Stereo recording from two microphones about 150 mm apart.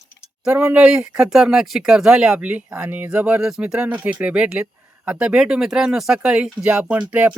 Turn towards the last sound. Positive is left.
turn(degrees=-10)  # may be behind; listen again after turning